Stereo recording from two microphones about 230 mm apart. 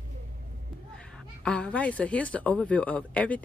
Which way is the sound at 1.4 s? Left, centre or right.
Centre.